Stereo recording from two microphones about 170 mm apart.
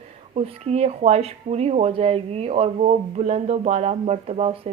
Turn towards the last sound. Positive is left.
turn(degrees=-40)  # may be behind; listen again after turning